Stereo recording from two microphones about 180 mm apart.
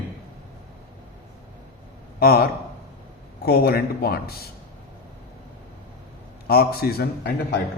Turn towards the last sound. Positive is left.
turn(degrees=60)  # may be behind; listen again after turning